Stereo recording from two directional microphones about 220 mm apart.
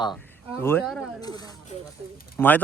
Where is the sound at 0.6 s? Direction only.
10° left (ahead or behind).